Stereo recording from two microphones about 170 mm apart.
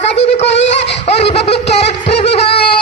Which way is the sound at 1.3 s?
35° left (ahead or behind).